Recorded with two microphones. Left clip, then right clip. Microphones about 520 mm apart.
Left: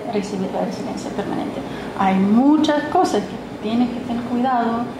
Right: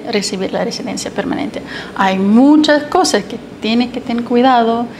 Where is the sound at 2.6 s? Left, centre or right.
Right.